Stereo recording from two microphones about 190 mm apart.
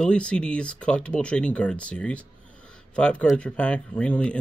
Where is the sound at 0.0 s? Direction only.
5° left (ahead or behind).